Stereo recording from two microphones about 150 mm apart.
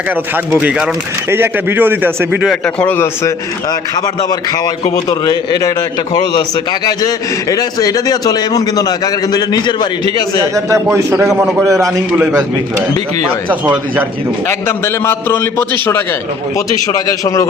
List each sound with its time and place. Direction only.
0.5 s speech: 10° right (ahead or behind)
2.5 s a man's voice: 5° left (ahead or behind)
4.3 s a man's voice: 25° left (ahead or behind)
7.5 s a man's voice: 25° left (ahead or behind)
10.4 s a man's voice: 20° right (ahead or behind)
13.5 s speech: 10° right (ahead or behind)
14.4 s a man's voice: 15° left (ahead or behind)
17.1 s a man's voice: 20° left (ahead or behind)